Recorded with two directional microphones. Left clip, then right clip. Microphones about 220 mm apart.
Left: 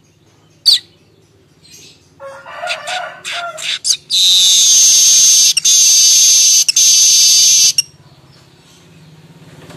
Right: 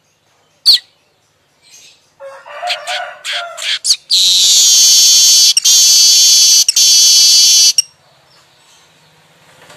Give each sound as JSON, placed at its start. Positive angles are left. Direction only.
{"t": 2.2, "sound": "chicken", "side_deg": 40}
{"t": 2.6, "sound": "bird", "side_deg": -15}